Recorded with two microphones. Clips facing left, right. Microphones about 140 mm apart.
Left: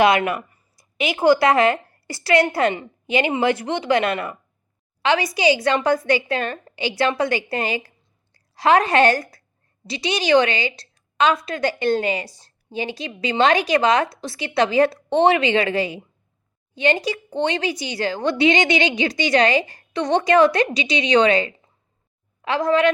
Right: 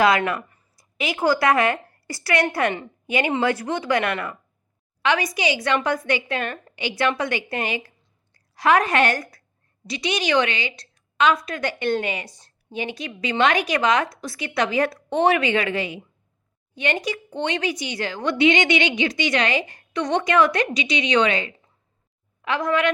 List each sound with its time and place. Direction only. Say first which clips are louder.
0.0 s a woman's voice: left 2 dB; 20° left (ahead or behind)